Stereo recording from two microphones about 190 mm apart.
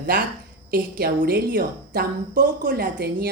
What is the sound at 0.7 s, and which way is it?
A woman's voice, 50° right (ahead or behind).